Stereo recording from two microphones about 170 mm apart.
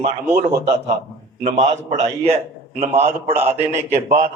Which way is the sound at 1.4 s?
40° right (ahead or behind).